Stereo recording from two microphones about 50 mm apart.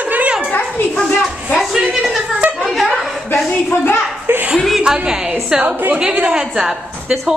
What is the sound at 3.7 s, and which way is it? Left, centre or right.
Speech, left.